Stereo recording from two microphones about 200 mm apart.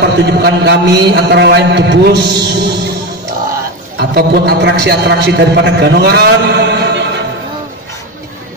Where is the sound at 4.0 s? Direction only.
55° right (ahead or behind).